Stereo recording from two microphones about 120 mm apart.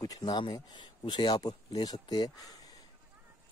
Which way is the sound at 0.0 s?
35° left (ahead or behind).